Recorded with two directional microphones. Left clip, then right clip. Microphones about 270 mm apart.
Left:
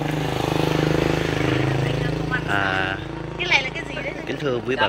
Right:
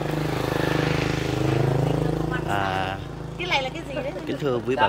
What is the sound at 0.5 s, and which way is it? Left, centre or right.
Vehicle, left.